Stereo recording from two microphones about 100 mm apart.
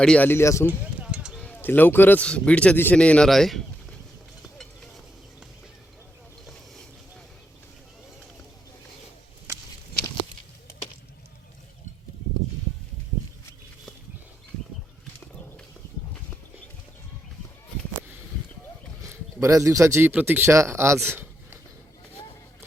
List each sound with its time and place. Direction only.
0.0 s speech: 10° left (ahead or behind)
0.3 s speech: 25° left (ahead or behind)
0.7 s a sound: 15° right (ahead or behind)
1.4 s a man's voice: 15° left (ahead or behind)
19.0 s speech: 30° right (ahead or behind)
22.2 s vehicle: 45° left (ahead or behind)